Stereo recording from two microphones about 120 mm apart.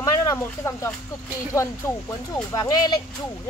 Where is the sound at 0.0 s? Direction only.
25° left (ahead or behind).